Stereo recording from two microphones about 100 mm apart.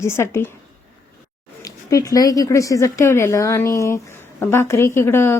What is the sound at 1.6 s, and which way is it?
Speech, 35° left (ahead or behind).